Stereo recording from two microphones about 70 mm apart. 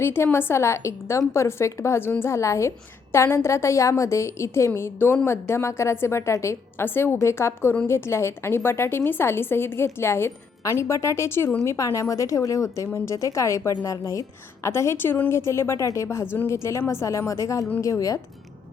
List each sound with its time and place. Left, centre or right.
0.0 s a woman's voice: left
16.2 s speech: left